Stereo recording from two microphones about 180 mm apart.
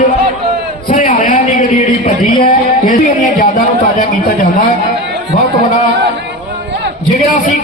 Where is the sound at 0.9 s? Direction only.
45° left (ahead or behind).